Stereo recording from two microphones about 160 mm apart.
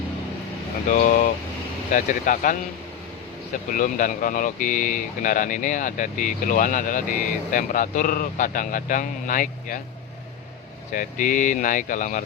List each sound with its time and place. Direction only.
0.9 s speech: 55° left (ahead or behind)
3.7 s speech: 55° left (ahead or behind)
10.9 s speech: 55° left (ahead or behind)